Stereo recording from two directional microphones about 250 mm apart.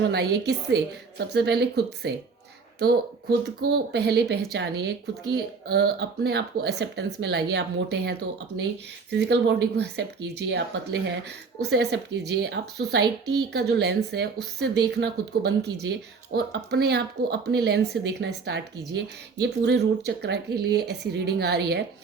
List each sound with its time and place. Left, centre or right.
0.0 s a woman's voice: right